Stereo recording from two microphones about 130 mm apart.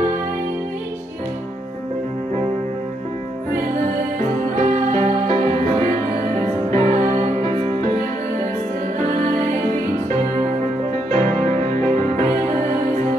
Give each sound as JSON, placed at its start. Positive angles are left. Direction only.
{"t": 4.6, "sound": "music", "side_deg": -70}
{"t": 6.7, "sound": "music", "side_deg": -60}
{"t": 7.4, "sound": "music", "side_deg": -50}
{"t": 11.1, "sound": "music", "side_deg": -55}